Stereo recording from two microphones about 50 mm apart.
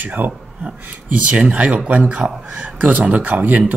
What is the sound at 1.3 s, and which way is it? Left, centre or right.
A man's voice, right.